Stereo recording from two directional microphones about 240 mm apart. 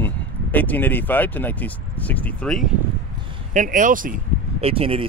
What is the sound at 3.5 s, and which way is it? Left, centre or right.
Speech, right.